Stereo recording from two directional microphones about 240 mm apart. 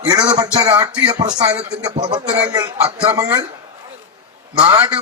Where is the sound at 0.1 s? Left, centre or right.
Centre.